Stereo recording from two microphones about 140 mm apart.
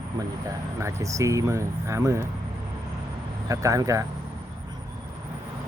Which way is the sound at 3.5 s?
25° right (ahead or behind).